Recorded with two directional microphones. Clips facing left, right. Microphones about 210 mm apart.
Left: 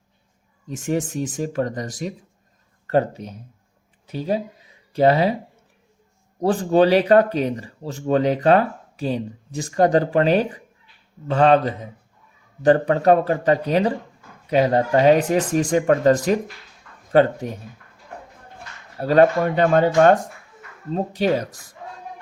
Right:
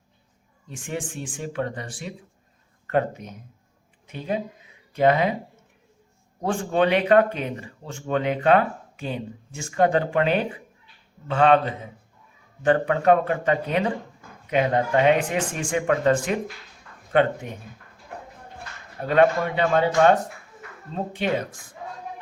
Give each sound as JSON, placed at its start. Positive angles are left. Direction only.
{"t": 0.7, "sound": "speech", "side_deg": 40}
{"t": 6.4, "sound": "speech", "side_deg": 35}
{"t": 18.9, "sound": "speech", "side_deg": 35}